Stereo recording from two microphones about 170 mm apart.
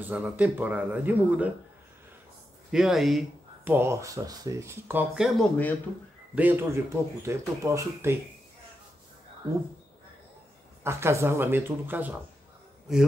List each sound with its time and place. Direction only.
0.0 s speech: 10° right (ahead or behind)
2.7 s speech: centre (ahead or behind)
3.6 s speech: 15° right (ahead or behind)
10.8 s speech: 15° right (ahead or behind)